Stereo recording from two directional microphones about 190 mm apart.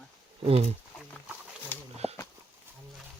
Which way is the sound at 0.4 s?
30° right (ahead or behind).